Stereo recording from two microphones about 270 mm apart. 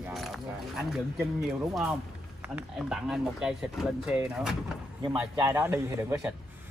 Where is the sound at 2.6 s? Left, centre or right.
Centre.